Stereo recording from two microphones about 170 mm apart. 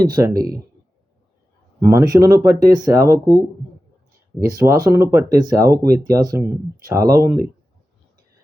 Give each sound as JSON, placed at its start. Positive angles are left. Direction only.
{"t": 0.0, "sound": "speech", "side_deg": -20}
{"t": 1.8, "sound": "speech", "side_deg": -15}